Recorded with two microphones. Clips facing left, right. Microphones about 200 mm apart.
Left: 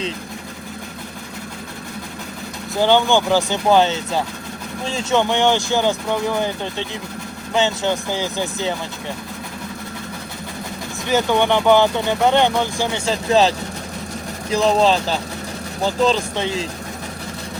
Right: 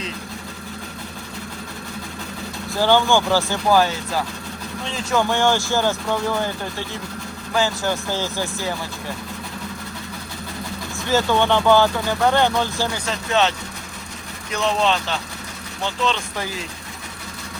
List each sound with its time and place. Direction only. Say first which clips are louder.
2.7 s speech: left 2 dB; 20° left (ahead or behind)
11.0 s speech: left 1 dB; 15° left (ahead or behind)
13.1 s speech: left 6 dB; 35° left (ahead or behind)
14.5 s speech: left 5 dB; 35° left (ahead or behind)